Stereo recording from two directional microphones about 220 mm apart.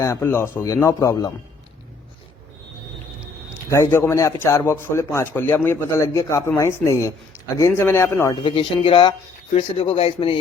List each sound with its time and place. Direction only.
0.0 s a man's voice: 10° left (ahead or behind)
3.7 s a man's voice: 10° left (ahead or behind)
8.4 s speech: 25° left (ahead or behind)